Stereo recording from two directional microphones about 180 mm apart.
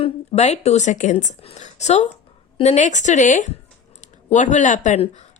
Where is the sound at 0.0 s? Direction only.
40° left (ahead or behind).